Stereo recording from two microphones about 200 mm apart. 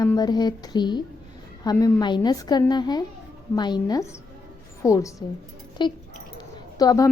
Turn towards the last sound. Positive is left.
turn(degrees=20)  # may be behind; listen again after turning